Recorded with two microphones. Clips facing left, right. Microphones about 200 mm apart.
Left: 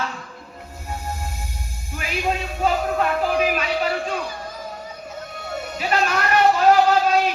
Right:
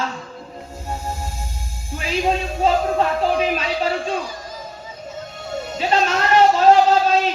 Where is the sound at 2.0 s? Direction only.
30° right (ahead or behind).